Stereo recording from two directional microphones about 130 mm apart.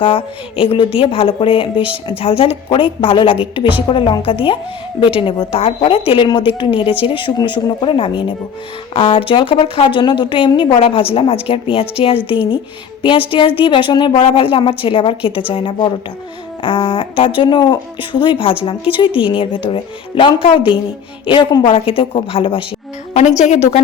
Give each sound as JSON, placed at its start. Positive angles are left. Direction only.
{"t": 0.0, "sound": "a woman's voice", "side_deg": 45}
{"t": 19.2, "sound": "speech", "side_deg": -10}
{"t": 19.6, "sound": "a woman's voice", "side_deg": 40}
{"t": 23.4, "sound": "a woman's voice", "side_deg": 55}